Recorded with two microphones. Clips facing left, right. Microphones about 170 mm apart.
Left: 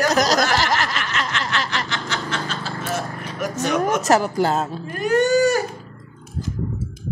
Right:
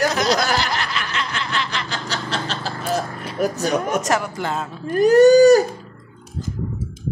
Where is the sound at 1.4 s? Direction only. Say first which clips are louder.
Left 1 dB; 40° left (ahead or behind).